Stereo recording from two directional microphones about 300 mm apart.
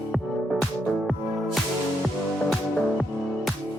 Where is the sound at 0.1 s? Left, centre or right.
Centre.